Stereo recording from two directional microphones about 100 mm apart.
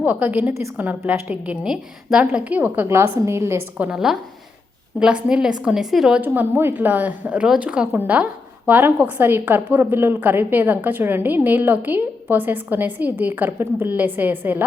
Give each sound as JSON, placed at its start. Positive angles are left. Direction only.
{"t": 0.0, "sound": "a woman's voice", "side_deg": -15}
{"t": 3.8, "sound": "a woman's voice", "side_deg": -10}
{"t": 6.2, "sound": "a woman's voice", "side_deg": -20}